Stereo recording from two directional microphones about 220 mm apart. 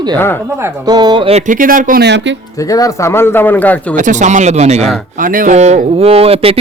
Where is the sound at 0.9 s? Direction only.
20° right (ahead or behind); by 2.3 s 50° right (ahead or behind).